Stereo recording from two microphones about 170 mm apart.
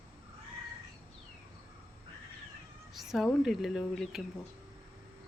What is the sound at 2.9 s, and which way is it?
Speech, centre (ahead or behind).